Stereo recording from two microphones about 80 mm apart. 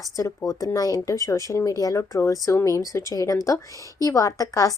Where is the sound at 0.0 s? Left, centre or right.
Left.